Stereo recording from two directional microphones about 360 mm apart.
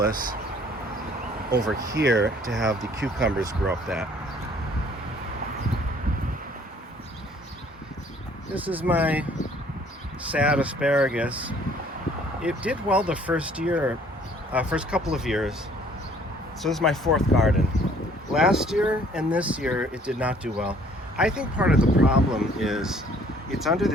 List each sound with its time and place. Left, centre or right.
0.1 s speech: right
1.6 s speech: centre
2.0 s speech: right
2.5 s speech: centre
8.5 s speech: centre
10.3 s speech: centre
16.6 s speech: centre